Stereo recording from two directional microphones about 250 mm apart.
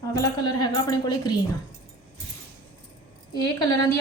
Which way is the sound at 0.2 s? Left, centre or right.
Centre.